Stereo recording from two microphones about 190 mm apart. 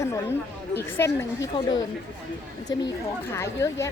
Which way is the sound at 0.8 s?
15° left (ahead or behind).